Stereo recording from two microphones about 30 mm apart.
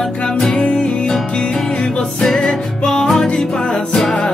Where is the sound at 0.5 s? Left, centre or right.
Left.